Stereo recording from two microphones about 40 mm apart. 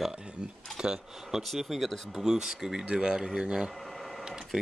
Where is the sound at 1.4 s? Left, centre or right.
Centre.